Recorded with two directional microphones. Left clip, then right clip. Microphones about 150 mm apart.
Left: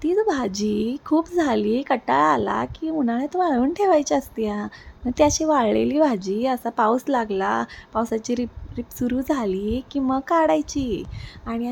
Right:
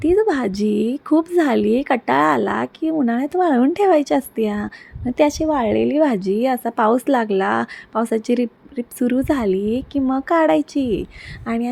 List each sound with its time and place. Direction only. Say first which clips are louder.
0.0 s a woman's voice: right 4 dB; 15° right (ahead or behind)
11.4 s speech: right 5 dB; 30° right (ahead or behind)